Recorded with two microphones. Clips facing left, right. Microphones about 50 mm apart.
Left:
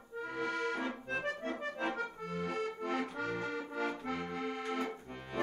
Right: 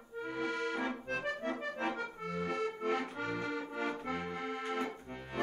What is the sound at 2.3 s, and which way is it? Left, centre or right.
Accordion, right.